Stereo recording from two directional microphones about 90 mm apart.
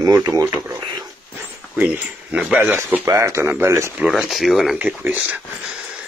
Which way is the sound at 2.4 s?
5° right (ahead or behind).